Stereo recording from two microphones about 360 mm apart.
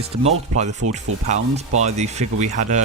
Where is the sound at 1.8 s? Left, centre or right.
Centre.